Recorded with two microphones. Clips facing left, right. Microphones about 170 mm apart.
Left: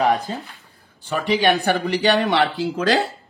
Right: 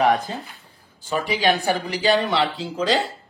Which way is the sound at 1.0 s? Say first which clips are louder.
Left 2 dB; 65° left (ahead or behind).